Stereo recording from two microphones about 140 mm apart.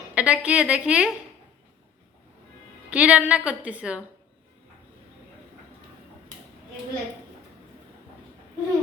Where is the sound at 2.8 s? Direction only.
10° right (ahead or behind).